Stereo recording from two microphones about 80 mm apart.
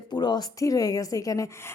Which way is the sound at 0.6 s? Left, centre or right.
Left.